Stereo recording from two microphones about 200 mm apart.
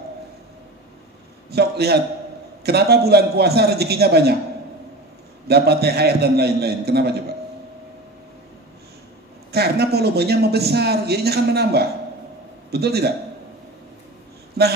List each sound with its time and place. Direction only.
1.5 s a man's voice: 55° right (ahead or behind)
5.5 s a man's voice: 55° right (ahead or behind)
9.5 s a man's voice: 55° right (ahead or behind)
14.6 s a man's voice: 55° right (ahead or behind)